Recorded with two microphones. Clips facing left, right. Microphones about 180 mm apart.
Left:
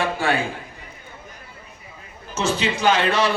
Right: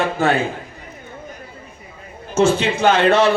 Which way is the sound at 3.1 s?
25° right (ahead or behind).